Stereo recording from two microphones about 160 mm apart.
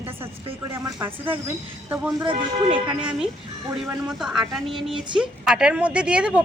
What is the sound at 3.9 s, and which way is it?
Speech, 5° right (ahead or behind).